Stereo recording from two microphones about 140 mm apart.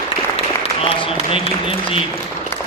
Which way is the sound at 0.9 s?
40° left (ahead or behind).